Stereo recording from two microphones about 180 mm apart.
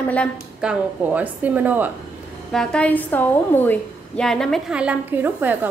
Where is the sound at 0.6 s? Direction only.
10° right (ahead or behind).